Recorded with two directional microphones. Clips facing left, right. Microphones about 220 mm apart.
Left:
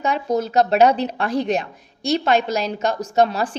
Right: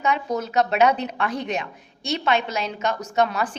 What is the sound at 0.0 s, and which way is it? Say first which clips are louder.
A woman's voice: left 3 dB; 35° left (ahead or behind).